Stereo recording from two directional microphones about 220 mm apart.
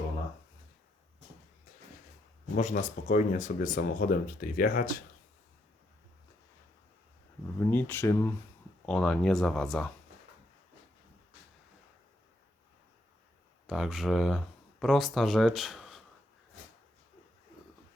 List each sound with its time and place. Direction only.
2.6 s speech: 30° left (ahead or behind)
7.6 s speech: 10° left (ahead or behind)
13.7 s speech: centre (ahead or behind)